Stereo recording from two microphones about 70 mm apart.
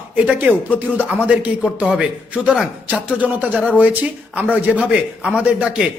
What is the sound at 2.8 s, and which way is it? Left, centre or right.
A man's voice, right.